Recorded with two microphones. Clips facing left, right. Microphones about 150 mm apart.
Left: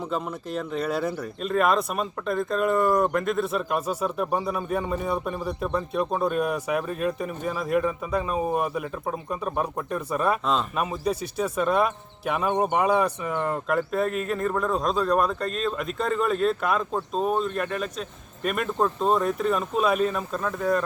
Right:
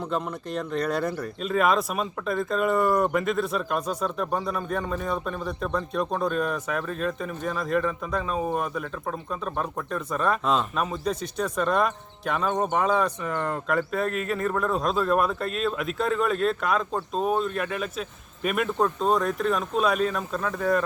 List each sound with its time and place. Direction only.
0.1 s speech: 5° left (ahead or behind)